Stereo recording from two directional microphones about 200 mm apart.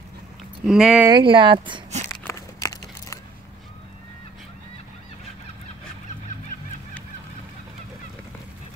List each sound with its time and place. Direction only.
0.7 s speech: 5° right (ahead or behind)
1.0 s speech: 25° right (ahead or behind)
2.0 s a sound: 15° left (ahead or behind)